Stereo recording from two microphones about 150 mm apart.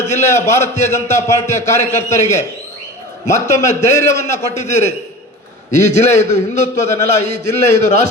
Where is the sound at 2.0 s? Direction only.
50° left (ahead or behind).